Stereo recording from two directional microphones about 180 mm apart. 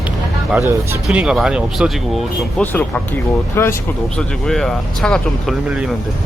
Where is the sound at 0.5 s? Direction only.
10° right (ahead or behind).